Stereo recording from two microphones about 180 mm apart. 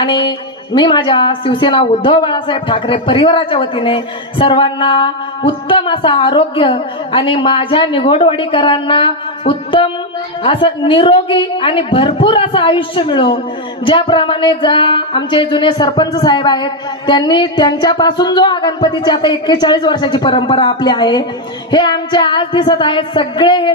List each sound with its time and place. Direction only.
0.0 s speech: 25° left (ahead or behind)